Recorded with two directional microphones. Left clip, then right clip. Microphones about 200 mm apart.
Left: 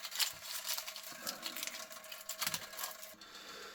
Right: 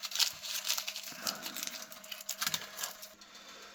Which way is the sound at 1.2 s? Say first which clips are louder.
Right 3 dB; 5° right (ahead or behind).